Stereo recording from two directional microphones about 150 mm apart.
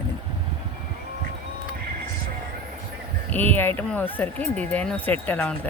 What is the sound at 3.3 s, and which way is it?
Speech, 10° left (ahead or behind).